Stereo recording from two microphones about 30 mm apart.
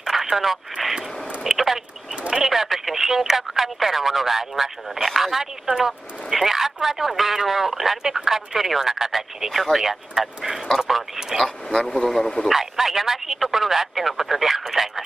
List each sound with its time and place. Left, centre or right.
0.0 s radio: centre
0.8 s vehicle: centre
2.4 s speech: centre
9.5 s speech: centre
9.8 s speech: centre
11.4 s speech: centre
12.5 s speech: centre